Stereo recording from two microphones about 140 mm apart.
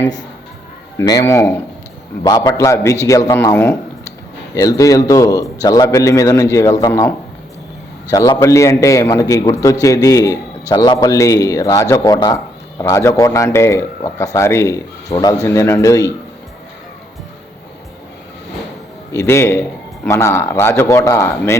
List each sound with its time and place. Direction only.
0.9 s a man's voice: 25° left (ahead or behind)
8.1 s a man's voice: 25° left (ahead or behind)
19.1 s a man's voice: 20° left (ahead or behind)